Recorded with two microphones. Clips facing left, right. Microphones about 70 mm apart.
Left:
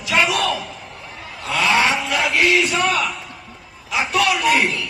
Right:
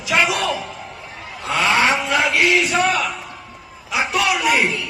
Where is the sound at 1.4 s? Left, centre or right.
Right.